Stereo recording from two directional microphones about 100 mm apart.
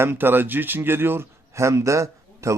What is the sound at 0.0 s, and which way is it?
A man's voice, 20° right (ahead or behind).